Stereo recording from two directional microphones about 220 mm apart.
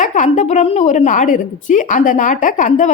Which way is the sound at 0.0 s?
35° left (ahead or behind).